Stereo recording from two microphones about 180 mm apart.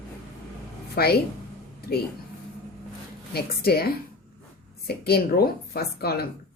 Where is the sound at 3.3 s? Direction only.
60° left (ahead or behind).